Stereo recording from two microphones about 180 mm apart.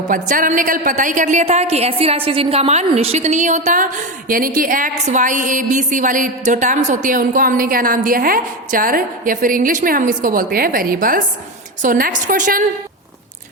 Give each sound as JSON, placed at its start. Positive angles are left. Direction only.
{"t": 0.1, "sound": "a woman's voice", "side_deg": -45}